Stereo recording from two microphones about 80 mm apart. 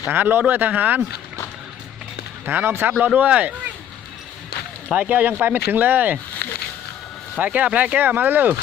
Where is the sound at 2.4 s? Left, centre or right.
Right.